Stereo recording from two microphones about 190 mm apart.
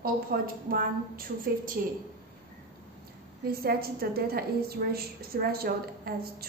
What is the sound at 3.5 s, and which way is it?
A woman's voice, 55° right (ahead or behind).